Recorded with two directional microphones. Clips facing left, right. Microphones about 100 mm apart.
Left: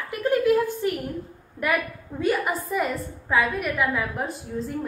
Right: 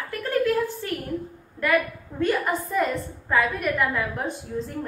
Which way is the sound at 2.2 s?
5° left (ahead or behind).